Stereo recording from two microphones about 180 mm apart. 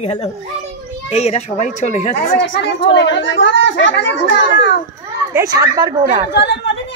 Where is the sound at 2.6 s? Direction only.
75° left (ahead or behind); by 4.7 s 90° left.